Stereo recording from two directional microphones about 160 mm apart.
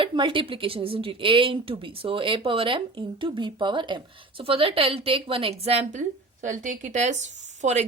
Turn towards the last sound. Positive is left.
turn(degrees=-45)  # may be behind; listen again after turning